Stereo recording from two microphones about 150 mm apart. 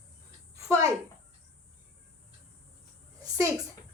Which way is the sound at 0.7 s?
20° right (ahead or behind).